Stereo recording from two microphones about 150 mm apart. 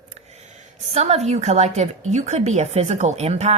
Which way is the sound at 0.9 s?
45° right (ahead or behind).